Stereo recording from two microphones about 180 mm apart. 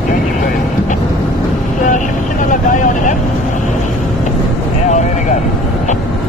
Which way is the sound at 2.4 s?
45° left (ahead or behind).